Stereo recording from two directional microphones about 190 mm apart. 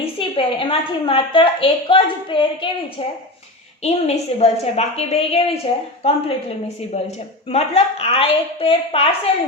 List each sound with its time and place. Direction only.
0.0 s a woman's voice: 25° left (ahead or behind)
3.8 s a woman's voice: 35° left (ahead or behind)
7.5 s a woman's voice: 35° left (ahead or behind)